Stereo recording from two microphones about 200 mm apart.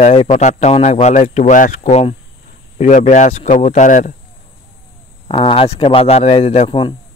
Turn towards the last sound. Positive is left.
turn(degrees=25)  # may be behind; listen again after turning